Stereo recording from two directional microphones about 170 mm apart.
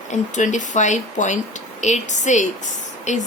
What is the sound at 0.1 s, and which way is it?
Speech, 45° left (ahead or behind).